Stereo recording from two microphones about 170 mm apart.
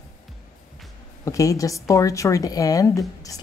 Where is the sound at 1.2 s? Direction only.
20° left (ahead or behind).